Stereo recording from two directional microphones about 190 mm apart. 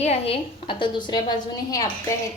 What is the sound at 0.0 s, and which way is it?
A woman's voice, 30° left (ahead or behind).